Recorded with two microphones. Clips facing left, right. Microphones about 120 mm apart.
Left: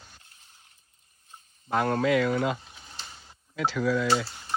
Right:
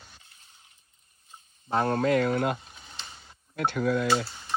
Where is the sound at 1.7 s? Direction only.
30° right (ahead or behind); by 2.6 s 50° right (ahead or behind).